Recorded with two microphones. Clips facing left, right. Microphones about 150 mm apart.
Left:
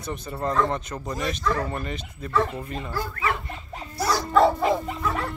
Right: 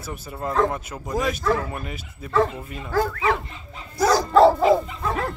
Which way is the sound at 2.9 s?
90° right.